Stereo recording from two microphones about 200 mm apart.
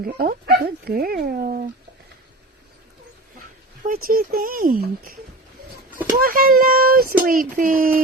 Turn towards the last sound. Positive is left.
turn(degrees=-45)  # may be behind; listen again after turning